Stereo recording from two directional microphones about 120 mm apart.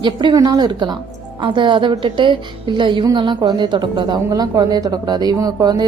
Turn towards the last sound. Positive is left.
turn(degrees=-35)  # may be behind; listen again after turning